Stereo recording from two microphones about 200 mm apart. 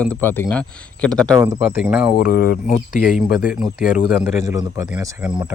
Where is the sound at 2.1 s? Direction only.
50° left (ahead or behind).